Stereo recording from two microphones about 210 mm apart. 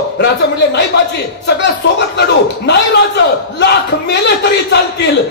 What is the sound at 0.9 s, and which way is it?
Speech, 50° left (ahead or behind).